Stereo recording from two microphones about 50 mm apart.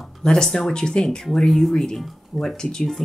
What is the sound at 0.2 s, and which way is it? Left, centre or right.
Speech, centre.